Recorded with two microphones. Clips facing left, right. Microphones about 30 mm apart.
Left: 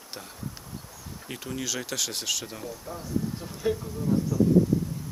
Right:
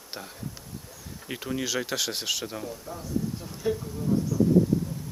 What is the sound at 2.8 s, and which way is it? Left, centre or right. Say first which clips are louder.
Speech: left 2 dB; centre.